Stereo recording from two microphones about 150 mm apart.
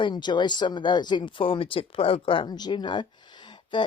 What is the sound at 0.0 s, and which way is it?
Speech, 30° left (ahead or behind).